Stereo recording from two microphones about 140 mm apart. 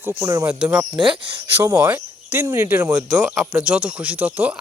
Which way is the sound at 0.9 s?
35° right (ahead or behind).